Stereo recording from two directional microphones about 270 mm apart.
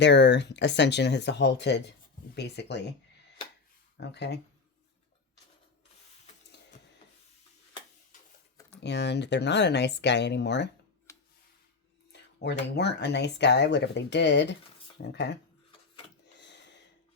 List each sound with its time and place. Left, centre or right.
0.0 s speech: left
4.0 s speech: left
8.8 s speech: left
11.1 s a sound: centre
12.1 s speech: left
16.4 s a sound: left